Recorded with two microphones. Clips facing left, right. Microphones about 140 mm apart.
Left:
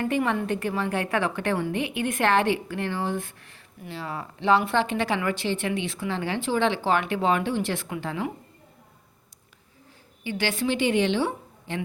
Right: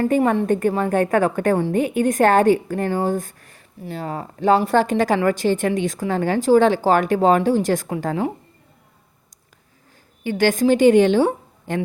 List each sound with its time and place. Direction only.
0.0 s a woman's voice: 40° right (ahead or behind)
10.2 s a woman's voice: 45° right (ahead or behind)